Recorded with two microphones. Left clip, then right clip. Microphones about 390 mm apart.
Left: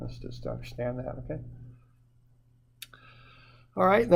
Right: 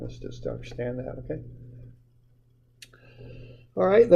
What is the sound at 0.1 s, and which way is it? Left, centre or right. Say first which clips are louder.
Speech: right 4 dB; left.